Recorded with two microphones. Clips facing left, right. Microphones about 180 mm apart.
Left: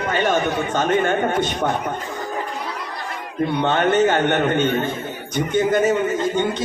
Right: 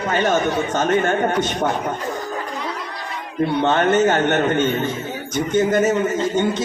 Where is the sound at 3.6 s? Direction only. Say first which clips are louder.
Right 1 dB; 45° right (ahead or behind).